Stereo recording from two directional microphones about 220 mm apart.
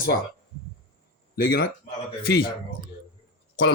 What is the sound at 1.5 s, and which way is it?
Speech, 45° left (ahead or behind).